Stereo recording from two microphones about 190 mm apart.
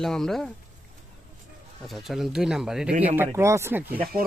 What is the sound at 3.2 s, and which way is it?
Speech, 15° right (ahead or behind).